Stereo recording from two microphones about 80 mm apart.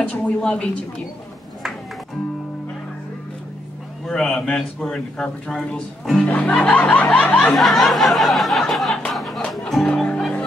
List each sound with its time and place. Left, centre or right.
0.0 s a man's voice: centre
4.0 s a man's voice: centre
7.5 s a sound: centre
9.1 s music: centre